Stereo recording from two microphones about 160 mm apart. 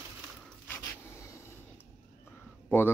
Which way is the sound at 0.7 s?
20° left (ahead or behind).